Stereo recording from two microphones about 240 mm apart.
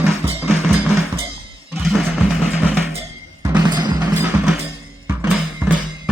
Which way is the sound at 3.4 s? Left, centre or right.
Centre.